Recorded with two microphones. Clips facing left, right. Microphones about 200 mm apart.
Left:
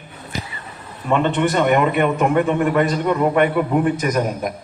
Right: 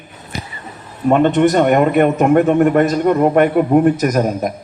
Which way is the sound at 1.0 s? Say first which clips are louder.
Right 6 dB; 45° right (ahead or behind).